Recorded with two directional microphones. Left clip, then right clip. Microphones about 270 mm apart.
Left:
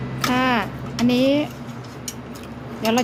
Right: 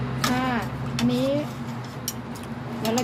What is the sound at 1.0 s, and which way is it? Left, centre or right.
Speech, left.